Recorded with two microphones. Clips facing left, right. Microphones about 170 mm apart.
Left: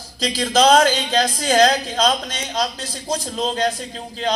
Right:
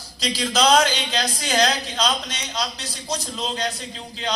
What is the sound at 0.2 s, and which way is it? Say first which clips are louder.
A man's voice: left 4 dB; 45° left (ahead or behind).